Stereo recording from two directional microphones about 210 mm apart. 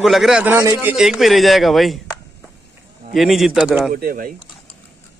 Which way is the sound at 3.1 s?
Centre (ahead or behind).